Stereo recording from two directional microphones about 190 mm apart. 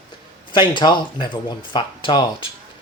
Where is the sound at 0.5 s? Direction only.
25° left (ahead or behind).